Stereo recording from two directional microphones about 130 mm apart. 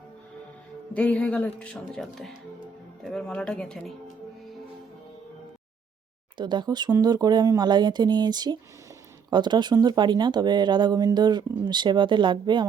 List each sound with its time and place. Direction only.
0.9 s speech: 10° left (ahead or behind)
6.3 s speech: 35° right (ahead or behind)